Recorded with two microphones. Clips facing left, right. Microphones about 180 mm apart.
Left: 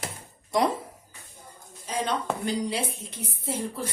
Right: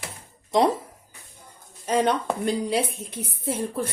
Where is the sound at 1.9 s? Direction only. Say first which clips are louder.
Right 6 dB; 60° right (ahead or behind).